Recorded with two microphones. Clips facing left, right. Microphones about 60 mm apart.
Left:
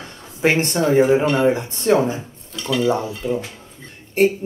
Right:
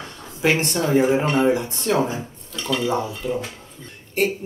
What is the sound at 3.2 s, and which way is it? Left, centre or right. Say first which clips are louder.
Speech: left 4 dB; left.